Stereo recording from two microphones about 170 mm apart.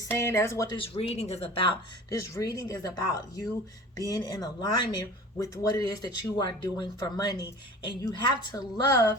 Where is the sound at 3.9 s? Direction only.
20° left (ahead or behind).